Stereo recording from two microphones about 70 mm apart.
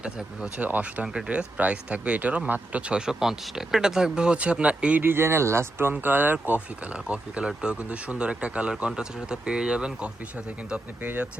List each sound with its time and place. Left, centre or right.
0.0 s speech: centre
0.6 s speech: right
5.0 s speech: right
5.9 s speech: right